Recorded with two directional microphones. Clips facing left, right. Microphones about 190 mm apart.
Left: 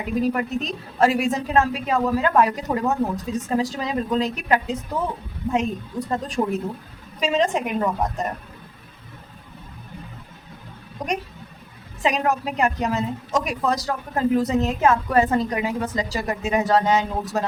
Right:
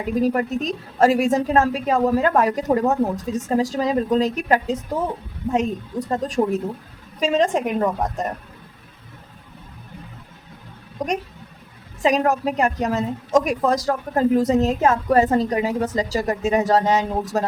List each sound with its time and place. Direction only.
0.0 s a woman's voice: 40° right (ahead or behind)
11.0 s a sound: 45° right (ahead or behind)
12.0 s a woman's voice: 40° right (ahead or behind)